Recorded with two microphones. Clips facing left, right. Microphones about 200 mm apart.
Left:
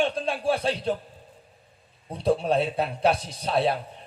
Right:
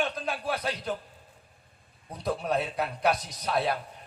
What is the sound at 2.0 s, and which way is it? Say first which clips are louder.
A man's voice: left 7 dB; 30° left (ahead or behind).